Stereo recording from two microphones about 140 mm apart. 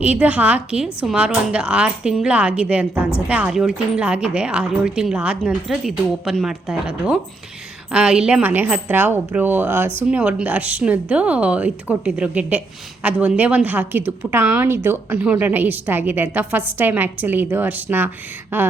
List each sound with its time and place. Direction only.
0.0 s a woman's voice: 10° right (ahead or behind)